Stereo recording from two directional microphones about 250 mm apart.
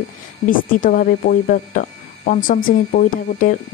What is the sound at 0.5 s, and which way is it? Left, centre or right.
Speech, left.